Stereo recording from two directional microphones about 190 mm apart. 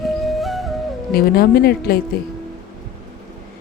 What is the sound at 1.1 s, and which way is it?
Speech, 55° left (ahead or behind).